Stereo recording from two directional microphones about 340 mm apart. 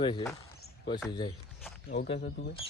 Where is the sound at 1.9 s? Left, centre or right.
Left.